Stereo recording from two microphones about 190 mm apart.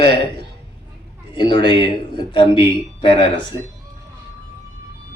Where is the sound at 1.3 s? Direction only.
25° left (ahead or behind).